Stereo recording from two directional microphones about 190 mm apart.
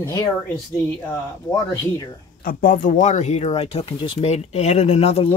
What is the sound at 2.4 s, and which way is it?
Speech, 45° left (ahead or behind).